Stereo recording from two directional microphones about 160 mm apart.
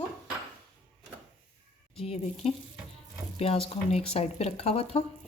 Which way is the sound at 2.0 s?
40° left (ahead or behind).